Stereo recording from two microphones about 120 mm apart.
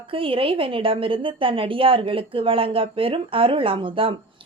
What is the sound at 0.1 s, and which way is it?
Speech, 50° right (ahead or behind).